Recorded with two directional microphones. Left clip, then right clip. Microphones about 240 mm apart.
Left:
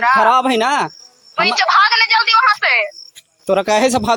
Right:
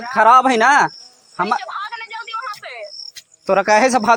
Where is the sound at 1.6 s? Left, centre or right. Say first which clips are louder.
Left 16 dB; left.